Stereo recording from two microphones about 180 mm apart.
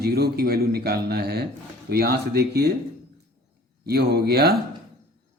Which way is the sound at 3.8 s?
60° right (ahead or behind).